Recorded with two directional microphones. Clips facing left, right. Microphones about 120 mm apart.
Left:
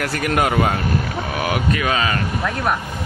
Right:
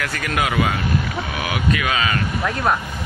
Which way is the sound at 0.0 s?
40° left (ahead or behind).